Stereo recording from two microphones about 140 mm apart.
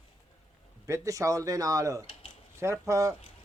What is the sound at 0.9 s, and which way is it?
Speech, 20° right (ahead or behind).